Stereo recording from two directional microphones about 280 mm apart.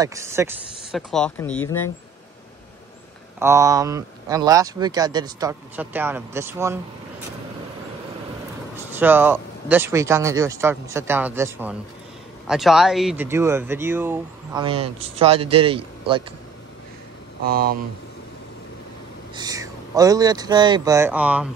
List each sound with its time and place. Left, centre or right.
0.0 s speech: centre
3.3 s speech: centre
8.9 s speech: centre
17.5 s speech: right
19.3 s speech: centre